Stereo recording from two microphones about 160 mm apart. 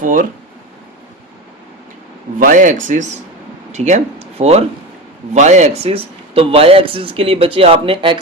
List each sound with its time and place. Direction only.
0.0 s speech: 60° right (ahead or behind)
2.4 s speech: 55° right (ahead or behind); by 8.2 s 30° right (ahead or behind)